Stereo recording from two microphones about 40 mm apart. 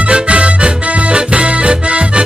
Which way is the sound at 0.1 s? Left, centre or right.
Right.